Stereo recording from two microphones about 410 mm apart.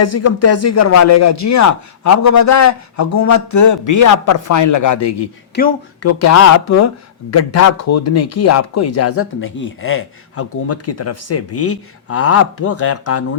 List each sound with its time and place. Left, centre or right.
0.0 s a man's voice: left
5.6 s speech: left
6.0 s speech: left